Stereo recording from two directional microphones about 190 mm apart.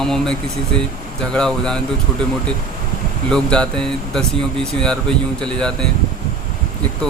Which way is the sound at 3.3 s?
5° left (ahead or behind).